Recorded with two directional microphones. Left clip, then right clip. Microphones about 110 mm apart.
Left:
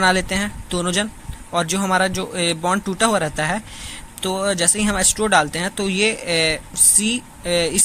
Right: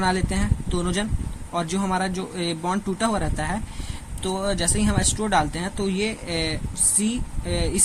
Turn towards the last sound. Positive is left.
turn(degrees=30)  # may be behind; listen again after turning